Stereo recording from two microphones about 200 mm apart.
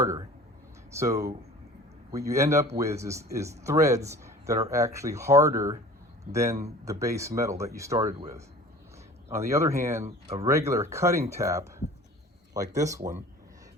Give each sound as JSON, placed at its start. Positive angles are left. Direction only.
{"t": 0.0, "sound": "speech", "side_deg": -15}
{"t": 9.3, "sound": "speech", "side_deg": -15}
{"t": 10.0, "sound": "speech", "side_deg": -30}
{"t": 10.4, "sound": "speech", "side_deg": -15}